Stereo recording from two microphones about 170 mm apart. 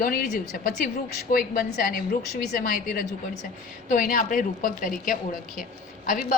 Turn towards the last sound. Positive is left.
turn(degrees=50)  # may be behind; listen again after turning